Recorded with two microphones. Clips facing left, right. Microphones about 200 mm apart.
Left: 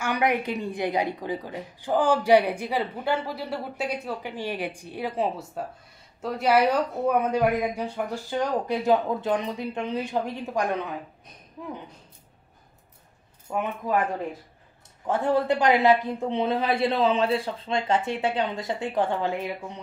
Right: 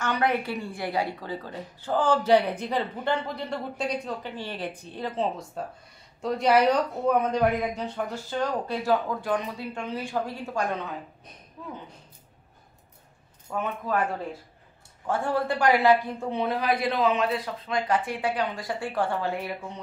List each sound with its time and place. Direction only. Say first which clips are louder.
0.0 s speech: left 1 dB; 15° left (ahead or behind)
13.5 s speech: left 2 dB; 15° left (ahead or behind)
15.0 s speech: left 3 dB; 20° left (ahead or behind)